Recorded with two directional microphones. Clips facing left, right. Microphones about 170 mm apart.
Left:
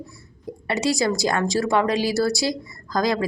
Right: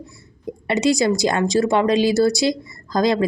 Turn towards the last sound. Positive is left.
turn(degrees=-25)  # may be behind; listen again after turning